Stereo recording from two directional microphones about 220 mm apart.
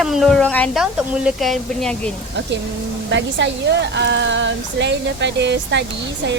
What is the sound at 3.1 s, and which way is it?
Speech, 55° right (ahead or behind).